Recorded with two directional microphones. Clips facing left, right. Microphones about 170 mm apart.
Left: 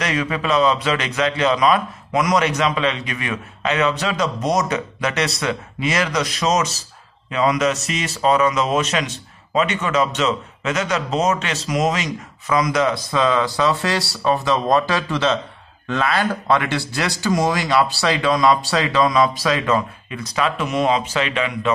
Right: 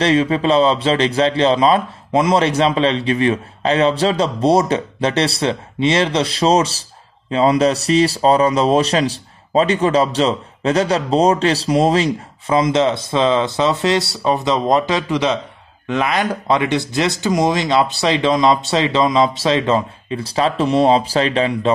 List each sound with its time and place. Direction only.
0.0 s speech: 30° right (ahead or behind)